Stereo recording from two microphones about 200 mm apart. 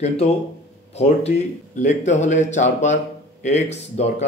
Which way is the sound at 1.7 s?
35° left (ahead or behind).